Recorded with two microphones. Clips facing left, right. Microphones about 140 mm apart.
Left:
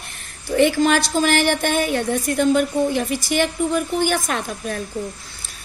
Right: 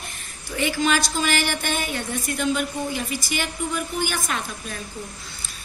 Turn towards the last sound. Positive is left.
turn(degrees=50)  # may be behind; listen again after turning